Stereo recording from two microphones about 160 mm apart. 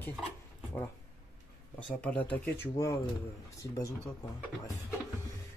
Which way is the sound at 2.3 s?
20° left (ahead or behind).